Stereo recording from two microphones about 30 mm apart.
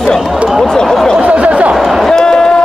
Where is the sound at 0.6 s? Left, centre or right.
Centre.